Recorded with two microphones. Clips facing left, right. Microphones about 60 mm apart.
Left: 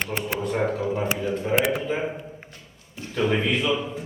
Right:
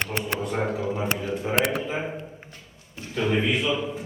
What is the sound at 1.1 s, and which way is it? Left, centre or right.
Speech, right.